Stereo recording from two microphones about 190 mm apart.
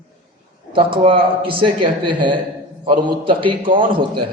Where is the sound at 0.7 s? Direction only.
25° right (ahead or behind).